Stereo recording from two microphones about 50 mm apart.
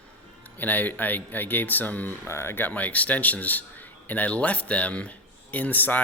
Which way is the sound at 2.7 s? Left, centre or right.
Left.